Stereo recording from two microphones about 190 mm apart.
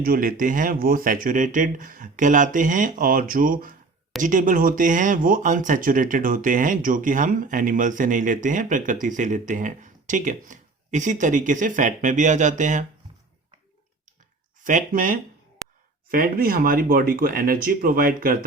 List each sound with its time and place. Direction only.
0.0 s speech: 50° right (ahead or behind)
14.6 s speech: 40° right (ahead or behind)